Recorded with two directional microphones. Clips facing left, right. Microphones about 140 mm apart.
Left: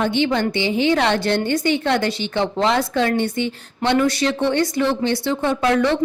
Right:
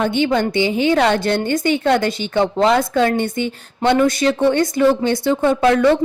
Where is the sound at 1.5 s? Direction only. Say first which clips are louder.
Right 5 dB; 50° right (ahead or behind).